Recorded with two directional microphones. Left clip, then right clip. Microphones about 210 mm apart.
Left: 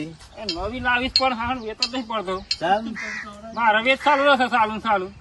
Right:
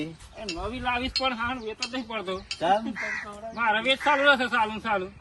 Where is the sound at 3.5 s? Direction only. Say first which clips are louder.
Left 6 dB; 10° left (ahead or behind).